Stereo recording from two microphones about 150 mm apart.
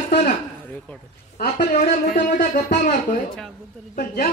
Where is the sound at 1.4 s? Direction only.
60° left (ahead or behind).